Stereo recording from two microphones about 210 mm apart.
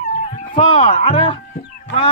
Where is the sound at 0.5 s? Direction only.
25° left (ahead or behind).